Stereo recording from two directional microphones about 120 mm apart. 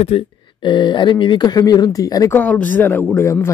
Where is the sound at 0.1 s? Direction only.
55° left (ahead or behind).